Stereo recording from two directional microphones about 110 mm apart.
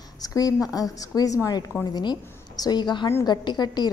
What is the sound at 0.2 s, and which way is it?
A woman's voice, 35° left (ahead or behind).